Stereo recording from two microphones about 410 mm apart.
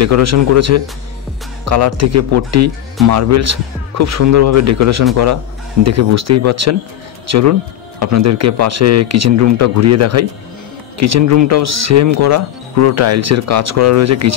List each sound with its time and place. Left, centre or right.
0.0 s speech: right